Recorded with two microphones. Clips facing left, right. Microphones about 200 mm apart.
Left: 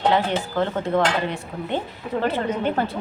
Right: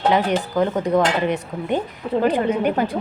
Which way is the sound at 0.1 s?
15° right (ahead or behind).